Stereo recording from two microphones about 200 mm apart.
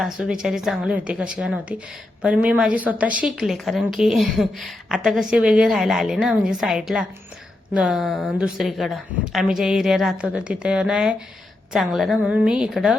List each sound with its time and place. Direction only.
0.0 s a woman's voice: 5° right (ahead or behind)